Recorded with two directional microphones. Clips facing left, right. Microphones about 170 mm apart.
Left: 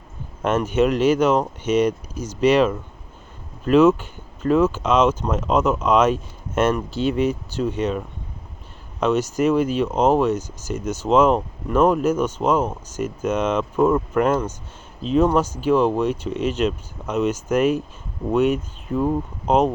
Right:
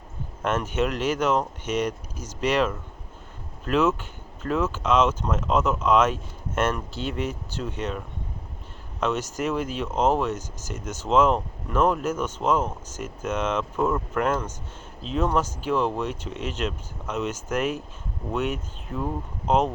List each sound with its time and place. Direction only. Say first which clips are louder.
0.4 s speech: left 6 dB; 15° left (ahead or behind)
19.5 s speech: left 4 dB; 15° left (ahead or behind)